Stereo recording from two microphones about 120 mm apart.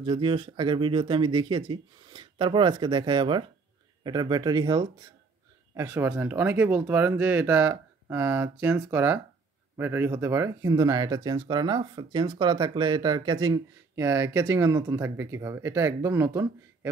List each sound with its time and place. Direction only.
0.0 s speech: 45° right (ahead or behind)
5.8 s speech: 20° right (ahead or behind)